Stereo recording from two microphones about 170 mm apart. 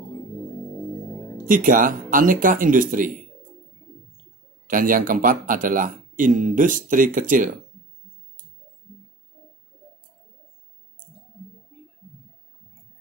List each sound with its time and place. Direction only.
1.5 s speech: 50° right (ahead or behind)
4.6 s speech: 55° right (ahead or behind)